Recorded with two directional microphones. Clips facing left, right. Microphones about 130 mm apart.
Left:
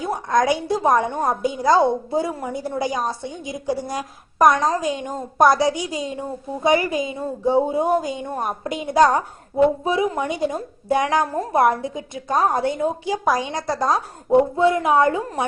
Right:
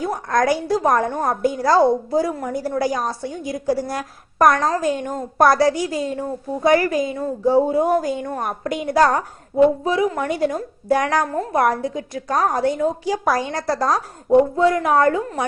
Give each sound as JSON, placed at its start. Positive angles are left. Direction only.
{"t": 0.0, "sound": "a woman's voice", "side_deg": 20}
{"t": 5.4, "sound": "a woman's voice", "side_deg": 20}
{"t": 15.2, "sound": "a woman's voice", "side_deg": 35}